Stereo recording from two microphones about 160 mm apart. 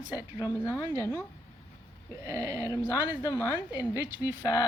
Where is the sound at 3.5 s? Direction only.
10° right (ahead or behind).